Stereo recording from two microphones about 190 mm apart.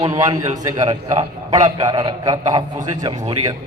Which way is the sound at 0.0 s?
20° right (ahead or behind).